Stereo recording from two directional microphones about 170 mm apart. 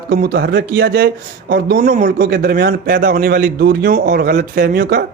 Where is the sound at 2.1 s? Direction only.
65° right (ahead or behind).